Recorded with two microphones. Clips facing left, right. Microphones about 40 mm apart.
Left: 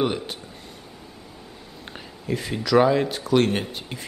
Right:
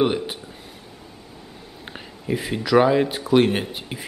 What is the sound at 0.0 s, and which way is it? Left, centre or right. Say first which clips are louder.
Speech: right 4 dB; centre.